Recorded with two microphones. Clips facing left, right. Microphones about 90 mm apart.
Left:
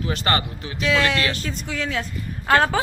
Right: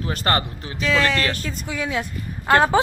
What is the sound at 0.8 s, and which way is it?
A woman's voice, centre (ahead or behind).